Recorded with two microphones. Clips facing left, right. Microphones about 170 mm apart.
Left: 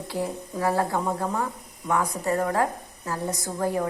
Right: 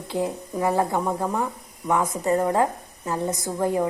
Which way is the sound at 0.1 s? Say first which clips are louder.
Right 4 dB; 20° right (ahead or behind).